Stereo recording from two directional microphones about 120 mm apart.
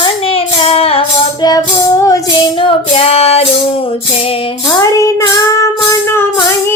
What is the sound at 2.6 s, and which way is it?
Female singing, 55° left (ahead or behind).